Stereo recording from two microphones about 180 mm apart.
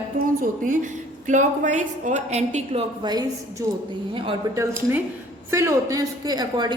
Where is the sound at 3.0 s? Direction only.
20° right (ahead or behind).